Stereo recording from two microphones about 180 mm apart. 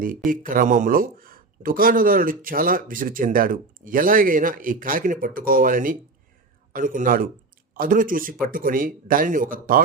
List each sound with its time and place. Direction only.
0.3 s speech: 50° right (ahead or behind)